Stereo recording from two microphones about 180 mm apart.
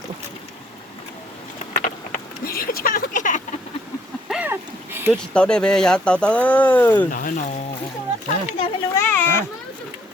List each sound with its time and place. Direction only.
1.7 s vehicle: 45° left (ahead or behind)
4.3 s a sound: 10° right (ahead or behind)
5.1 s speech: 5° left (ahead or behind)
7.1 s speech: 50° left (ahead or behind)
8.4 s a sound: 30° left (ahead or behind)
9.0 s children playing: 10° left (ahead or behind)